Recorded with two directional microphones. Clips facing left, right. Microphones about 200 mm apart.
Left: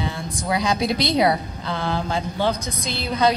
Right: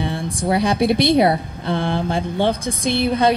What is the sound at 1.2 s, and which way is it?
Speech, 25° right (ahead or behind).